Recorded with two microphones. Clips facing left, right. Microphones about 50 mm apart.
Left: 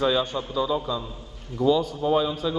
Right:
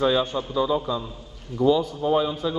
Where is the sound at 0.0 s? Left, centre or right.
Centre.